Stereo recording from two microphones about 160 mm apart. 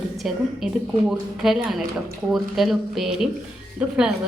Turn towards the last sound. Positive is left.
turn(degrees=-5)  # may be behind; listen again after turning